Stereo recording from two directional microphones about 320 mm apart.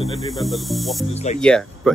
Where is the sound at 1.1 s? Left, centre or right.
Left.